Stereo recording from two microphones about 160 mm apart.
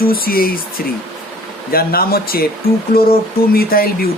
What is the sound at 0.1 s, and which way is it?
Speech, 65° left (ahead or behind).